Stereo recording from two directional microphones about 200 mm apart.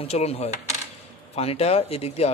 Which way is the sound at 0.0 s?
30° left (ahead or behind).